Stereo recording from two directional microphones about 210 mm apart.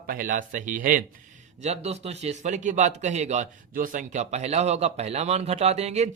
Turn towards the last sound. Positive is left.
turn(degrees=-30)  # may be behind; listen again after turning